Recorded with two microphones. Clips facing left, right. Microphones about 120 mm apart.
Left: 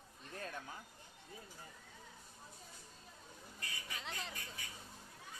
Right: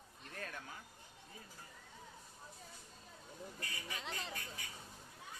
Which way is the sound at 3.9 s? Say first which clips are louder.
Right 1 dB; centre (ahead or behind).